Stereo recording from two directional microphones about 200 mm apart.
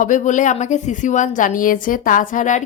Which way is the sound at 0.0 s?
40° left (ahead or behind).